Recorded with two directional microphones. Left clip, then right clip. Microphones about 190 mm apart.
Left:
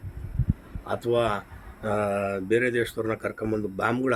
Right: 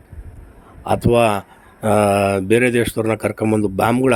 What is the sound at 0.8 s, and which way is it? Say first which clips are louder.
Speech: right 10 dB; 40° right (ahead or behind).